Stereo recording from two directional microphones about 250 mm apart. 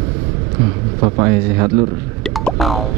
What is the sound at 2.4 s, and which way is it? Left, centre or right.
Music, centre.